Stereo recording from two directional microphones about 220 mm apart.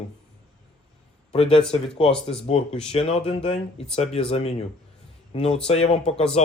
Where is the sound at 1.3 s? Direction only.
25° left (ahead or behind).